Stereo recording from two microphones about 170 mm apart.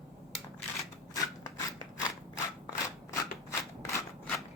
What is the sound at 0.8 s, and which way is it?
Scissors, 20° left (ahead or behind).